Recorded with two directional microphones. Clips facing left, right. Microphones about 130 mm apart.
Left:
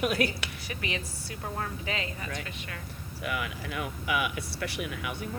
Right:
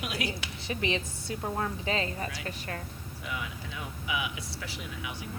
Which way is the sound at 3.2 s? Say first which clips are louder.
Left 5 dB; 70° left (ahead or behind).